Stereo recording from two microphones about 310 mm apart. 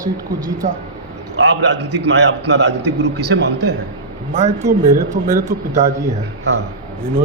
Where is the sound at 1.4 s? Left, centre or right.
Right.